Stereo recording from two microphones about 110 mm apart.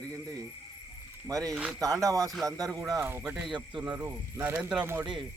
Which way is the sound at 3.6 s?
40° right (ahead or behind).